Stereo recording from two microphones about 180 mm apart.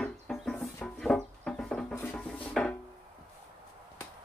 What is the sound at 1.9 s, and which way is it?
Music, 10° left (ahead or behind).